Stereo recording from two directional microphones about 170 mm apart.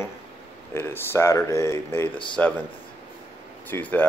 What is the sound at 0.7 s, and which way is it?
Speech, 10° left (ahead or behind).